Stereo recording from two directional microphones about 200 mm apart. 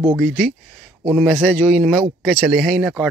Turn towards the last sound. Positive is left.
turn(degrees=0)  # may be behind; listen again after turning